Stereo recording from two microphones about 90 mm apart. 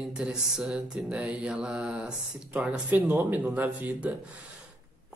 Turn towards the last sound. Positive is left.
turn(degrees=-15)  # may be behind; listen again after turning